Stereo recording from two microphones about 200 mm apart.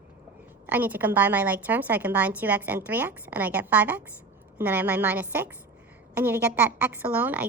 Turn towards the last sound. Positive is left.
turn(degrees=-10)  # may be behind; listen again after turning